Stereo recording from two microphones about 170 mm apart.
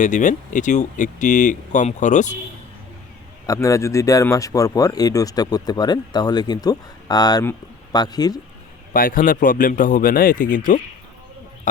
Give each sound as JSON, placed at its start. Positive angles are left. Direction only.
{"t": 0.0, "sound": "speech", "side_deg": 45}
{"t": 3.4, "sound": "speech", "side_deg": 20}
{"t": 8.9, "sound": "a man's voice", "side_deg": 55}